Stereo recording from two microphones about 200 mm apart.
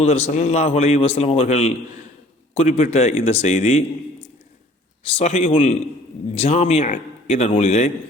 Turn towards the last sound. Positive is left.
turn(degrees=40)  # may be behind; listen again after turning